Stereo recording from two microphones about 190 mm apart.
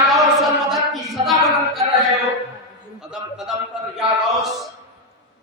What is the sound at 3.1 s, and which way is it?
Speech, 5° right (ahead or behind).